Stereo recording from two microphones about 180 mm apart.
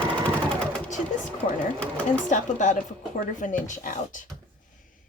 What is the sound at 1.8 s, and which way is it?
Speech, 5° left (ahead or behind).